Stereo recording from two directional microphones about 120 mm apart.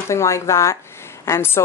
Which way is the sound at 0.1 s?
25° left (ahead or behind).